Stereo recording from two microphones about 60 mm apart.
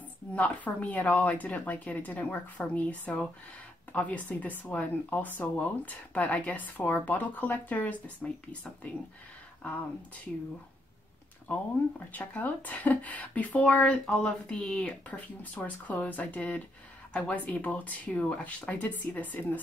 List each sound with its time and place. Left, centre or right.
0.4 s speech: left
9.6 s speech: left
11.5 s speech: left
14.0 s speech: centre; by 19.6 s left